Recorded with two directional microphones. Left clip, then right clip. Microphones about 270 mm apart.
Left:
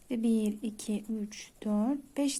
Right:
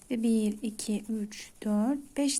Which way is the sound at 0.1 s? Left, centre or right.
Centre.